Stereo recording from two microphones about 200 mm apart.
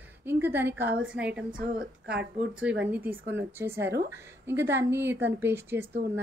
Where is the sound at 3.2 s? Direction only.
60° right (ahead or behind).